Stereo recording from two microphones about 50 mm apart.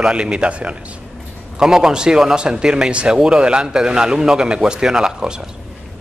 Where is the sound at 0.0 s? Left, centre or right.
Centre.